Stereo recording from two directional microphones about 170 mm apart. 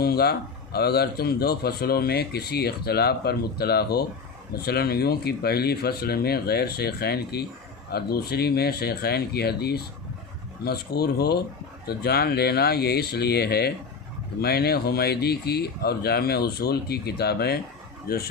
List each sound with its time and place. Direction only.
0.0 s speech: 65° left (ahead or behind)